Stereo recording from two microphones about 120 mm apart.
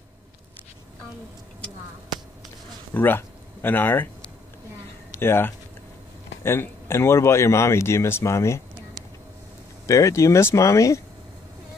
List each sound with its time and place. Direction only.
2.9 s speech: 15° left (ahead or behind)
5.1 s speech: 20° left (ahead or behind)
9.8 s speech: 25° left (ahead or behind)